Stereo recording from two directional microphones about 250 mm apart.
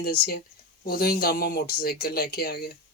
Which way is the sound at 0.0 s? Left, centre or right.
Left.